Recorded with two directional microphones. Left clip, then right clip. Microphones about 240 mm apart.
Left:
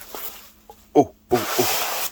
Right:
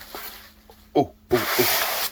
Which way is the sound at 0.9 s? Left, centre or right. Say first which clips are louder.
Left 4 dB; centre.